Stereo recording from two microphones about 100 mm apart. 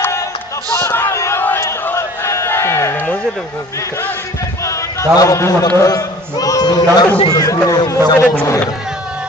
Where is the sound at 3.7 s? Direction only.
30° left (ahead or behind).